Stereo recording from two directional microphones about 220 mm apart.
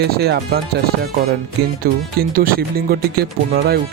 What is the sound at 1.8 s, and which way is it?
Speech, 40° right (ahead or behind).